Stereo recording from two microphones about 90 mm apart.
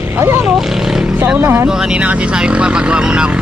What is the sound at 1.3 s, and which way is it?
Speech, 25° right (ahead or behind).